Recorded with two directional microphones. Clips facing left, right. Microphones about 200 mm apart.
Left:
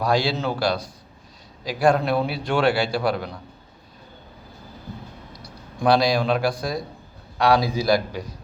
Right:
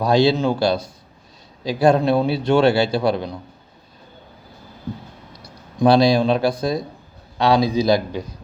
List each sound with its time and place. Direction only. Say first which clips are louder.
0.0 s a man's voice: right 6 dB; 25° right (ahead or behind)
5.4 s a man's voice: right 8 dB; 25° right (ahead or behind)